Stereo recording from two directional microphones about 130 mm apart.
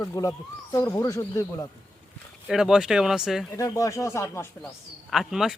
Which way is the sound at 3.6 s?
25° left (ahead or behind).